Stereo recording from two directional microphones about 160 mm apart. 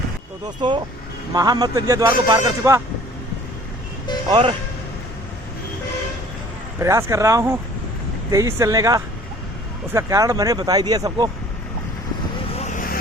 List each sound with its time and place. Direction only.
0.6 s speech: 30° right (ahead or behind)
4.3 s speech: 35° right (ahead or behind)
6.7 s speech: 20° right (ahead or behind)
12.5 s vehicle: 50° left (ahead or behind)